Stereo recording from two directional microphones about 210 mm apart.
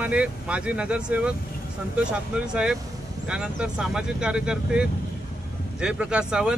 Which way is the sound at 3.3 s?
5° right (ahead or behind).